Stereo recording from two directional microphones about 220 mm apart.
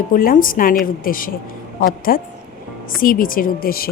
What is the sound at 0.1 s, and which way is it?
A woman's voice, 40° left (ahead or behind).